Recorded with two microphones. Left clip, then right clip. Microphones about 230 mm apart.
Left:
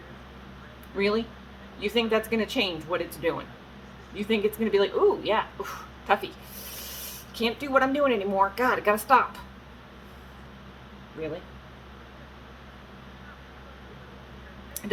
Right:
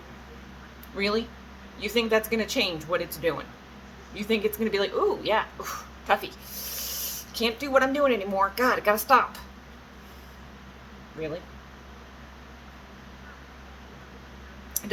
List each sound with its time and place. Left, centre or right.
0.9 s speech: centre
7.3 s speech: centre